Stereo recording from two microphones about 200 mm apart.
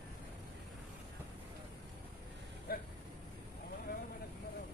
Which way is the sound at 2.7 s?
50° left (ahead or behind).